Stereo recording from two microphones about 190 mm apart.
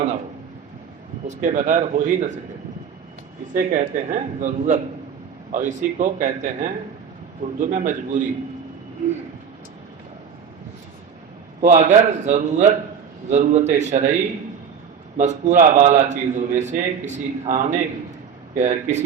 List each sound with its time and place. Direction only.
1.3 s a man's voice: 40° right (ahead or behind)
3.5 s a man's voice: 45° right (ahead or behind)
11.6 s a man's voice: 40° right (ahead or behind)
15.2 s a man's voice: 40° right (ahead or behind)